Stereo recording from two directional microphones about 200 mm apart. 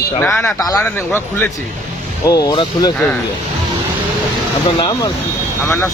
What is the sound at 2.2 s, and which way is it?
Speech, 20° left (ahead or behind).